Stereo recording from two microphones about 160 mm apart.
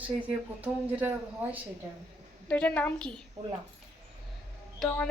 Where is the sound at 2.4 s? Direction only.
10° left (ahead or behind).